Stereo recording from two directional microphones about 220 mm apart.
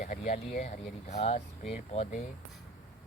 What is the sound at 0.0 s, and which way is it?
Vehicle, 45° left (ahead or behind).